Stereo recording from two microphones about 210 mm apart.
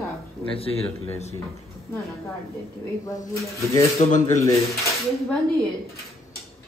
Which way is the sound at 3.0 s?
15° left (ahead or behind).